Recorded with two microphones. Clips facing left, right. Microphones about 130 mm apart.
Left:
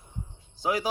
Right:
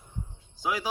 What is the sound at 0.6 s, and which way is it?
Speech, 40° left (ahead or behind).